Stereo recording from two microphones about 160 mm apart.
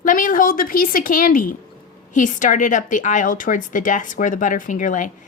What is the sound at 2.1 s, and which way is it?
A woman's voice, 50° left (ahead or behind).